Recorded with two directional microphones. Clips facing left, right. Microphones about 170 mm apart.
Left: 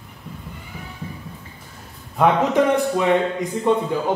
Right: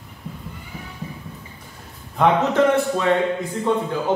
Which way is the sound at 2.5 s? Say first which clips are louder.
Even; 15° left (ahead or behind).